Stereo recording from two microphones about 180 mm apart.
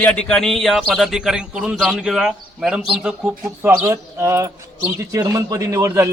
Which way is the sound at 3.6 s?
15° right (ahead or behind).